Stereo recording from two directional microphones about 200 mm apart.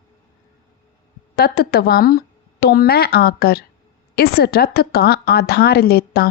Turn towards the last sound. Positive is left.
turn(degrees=50)  # may be behind; listen again after turning